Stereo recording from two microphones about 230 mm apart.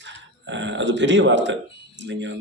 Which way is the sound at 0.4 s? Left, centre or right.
Right.